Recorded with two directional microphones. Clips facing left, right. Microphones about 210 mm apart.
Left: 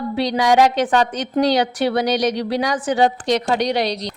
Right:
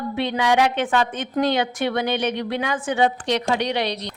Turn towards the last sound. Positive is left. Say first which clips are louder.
# left 4 dB
turn(degrees=40)  # may be behind; listen again after turning